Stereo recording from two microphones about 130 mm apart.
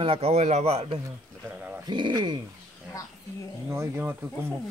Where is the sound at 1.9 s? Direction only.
35° right (ahead or behind).